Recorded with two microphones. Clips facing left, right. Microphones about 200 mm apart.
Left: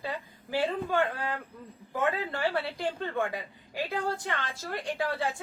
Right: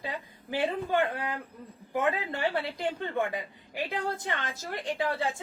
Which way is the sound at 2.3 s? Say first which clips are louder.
Even; 20° right (ahead or behind).